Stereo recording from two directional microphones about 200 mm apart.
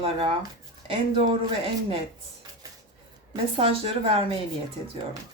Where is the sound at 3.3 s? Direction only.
25° right (ahead or behind).